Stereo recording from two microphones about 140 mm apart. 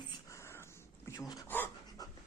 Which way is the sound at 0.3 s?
20° left (ahead or behind).